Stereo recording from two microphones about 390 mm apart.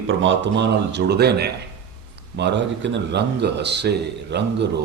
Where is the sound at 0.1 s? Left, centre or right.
Right.